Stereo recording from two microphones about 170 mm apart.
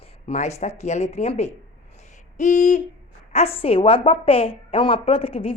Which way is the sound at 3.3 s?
35° left (ahead or behind).